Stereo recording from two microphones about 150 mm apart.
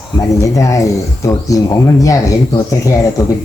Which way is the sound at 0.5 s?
20° left (ahead or behind).